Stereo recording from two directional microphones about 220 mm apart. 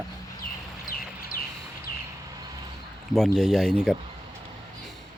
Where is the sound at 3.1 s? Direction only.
Centre (ahead or behind).